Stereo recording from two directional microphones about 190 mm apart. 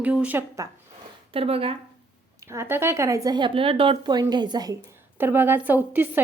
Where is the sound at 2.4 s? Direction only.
15° right (ahead or behind).